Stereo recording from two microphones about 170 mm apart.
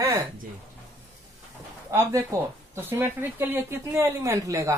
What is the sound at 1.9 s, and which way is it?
Speech, 15° right (ahead or behind).